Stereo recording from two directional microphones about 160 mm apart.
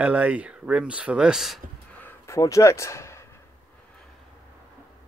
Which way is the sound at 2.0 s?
20° left (ahead or behind).